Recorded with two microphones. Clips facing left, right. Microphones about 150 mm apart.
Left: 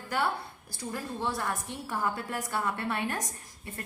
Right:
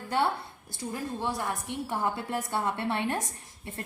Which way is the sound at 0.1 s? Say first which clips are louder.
Right 2 dB; 30° right (ahead or behind).